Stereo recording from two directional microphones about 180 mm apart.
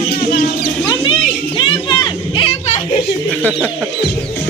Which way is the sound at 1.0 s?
25° left (ahead or behind).